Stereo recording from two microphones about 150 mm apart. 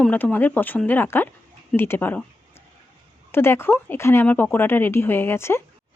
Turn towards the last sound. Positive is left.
turn(degrees=15)  # may be behind; listen again after turning